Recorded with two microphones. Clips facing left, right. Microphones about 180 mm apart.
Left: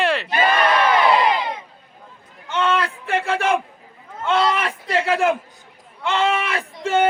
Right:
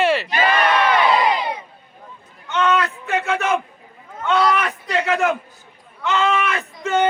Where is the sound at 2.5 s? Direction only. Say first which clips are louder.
Right 2 dB; 30° left (ahead or behind).